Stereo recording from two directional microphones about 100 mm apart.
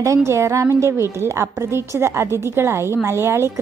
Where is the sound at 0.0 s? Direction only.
30° right (ahead or behind).